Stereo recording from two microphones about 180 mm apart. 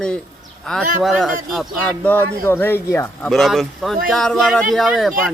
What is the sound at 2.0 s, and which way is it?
Speech, 10° left (ahead or behind).